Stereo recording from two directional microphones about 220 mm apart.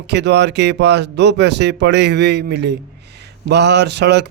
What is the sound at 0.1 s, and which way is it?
A man's voice, 50° right (ahead or behind).